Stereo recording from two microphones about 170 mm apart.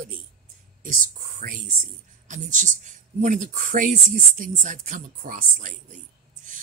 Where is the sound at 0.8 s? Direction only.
50° right (ahead or behind).